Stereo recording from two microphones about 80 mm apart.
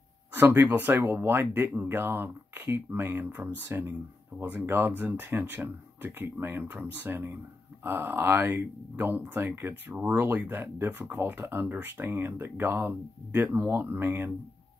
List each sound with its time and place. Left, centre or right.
0.3 s speech: right